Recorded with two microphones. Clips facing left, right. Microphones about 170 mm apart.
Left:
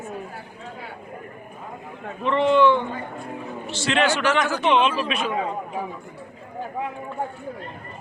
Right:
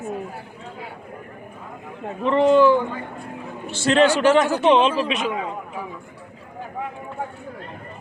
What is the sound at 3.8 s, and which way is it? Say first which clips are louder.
A man's voice: right 6 dB; 35° right (ahead or behind).